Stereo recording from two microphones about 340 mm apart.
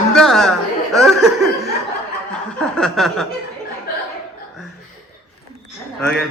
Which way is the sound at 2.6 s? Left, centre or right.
Centre.